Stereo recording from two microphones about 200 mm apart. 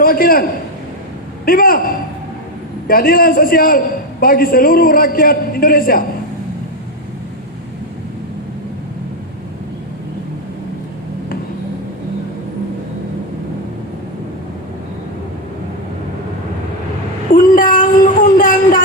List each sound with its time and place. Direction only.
0.0 s a man's voice: 45° left (ahead or behind)
1.5 s a man's voice: 45° left (ahead or behind)
2.8 s a man's voice: 45° left (ahead or behind)
17.3 s a sound: 40° left (ahead or behind)